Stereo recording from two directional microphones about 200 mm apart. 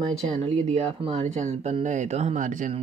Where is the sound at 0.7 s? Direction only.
30° right (ahead or behind).